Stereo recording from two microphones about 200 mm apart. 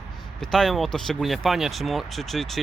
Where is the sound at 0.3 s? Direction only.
Centre (ahead or behind).